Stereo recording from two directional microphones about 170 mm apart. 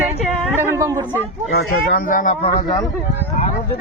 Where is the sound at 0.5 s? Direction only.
15° right (ahead or behind).